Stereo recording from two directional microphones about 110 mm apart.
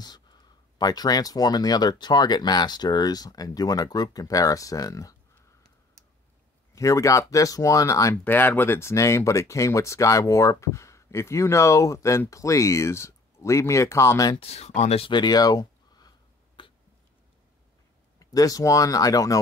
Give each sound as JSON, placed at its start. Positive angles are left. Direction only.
{"t": 0.7, "sound": "speech", "side_deg": 35}
{"t": 6.7, "sound": "speech", "side_deg": 30}
{"t": 8.2, "sound": "speech", "side_deg": 15}
{"t": 14.3, "sound": "speech", "side_deg": 70}
{"t": 15.0, "sound": "speech", "side_deg": 40}
{"t": 16.6, "sound": "hiccup", "side_deg": 50}
{"t": 18.2, "sound": "speech", "side_deg": 35}